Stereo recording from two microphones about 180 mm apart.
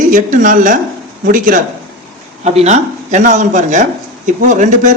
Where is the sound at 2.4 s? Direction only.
35° right (ahead or behind).